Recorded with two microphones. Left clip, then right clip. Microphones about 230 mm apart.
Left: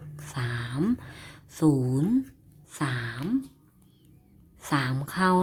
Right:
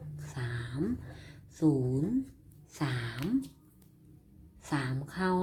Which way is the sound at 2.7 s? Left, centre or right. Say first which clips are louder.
Left 5 dB; left.